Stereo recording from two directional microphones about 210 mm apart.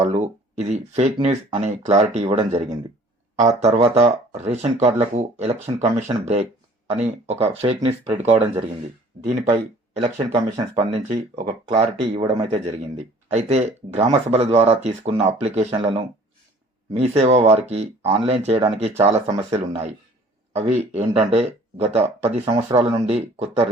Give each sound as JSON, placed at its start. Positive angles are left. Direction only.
{"t": 0.0, "sound": "speech", "side_deg": -30}
{"t": 11.3, "sound": "speech", "side_deg": -25}